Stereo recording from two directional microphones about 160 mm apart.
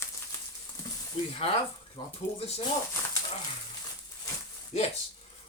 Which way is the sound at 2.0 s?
30° left (ahead or behind).